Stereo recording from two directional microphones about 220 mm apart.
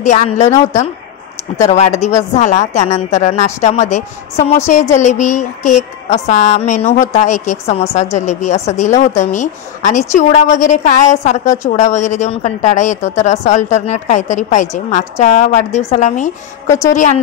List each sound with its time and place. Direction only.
0.0 s a woman's voice: 30° left (ahead or behind)
1.7 s a woman's voice: 30° left (ahead or behind)
16.6 s a woman's voice: 15° left (ahead or behind)
16.9 s a woman's voice: 35° left (ahead or behind)